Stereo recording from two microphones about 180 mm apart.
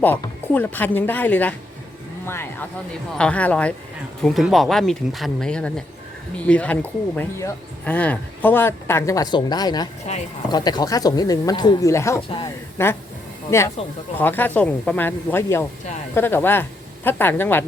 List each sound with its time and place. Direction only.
0.0 s speech: 10° left (ahead or behind)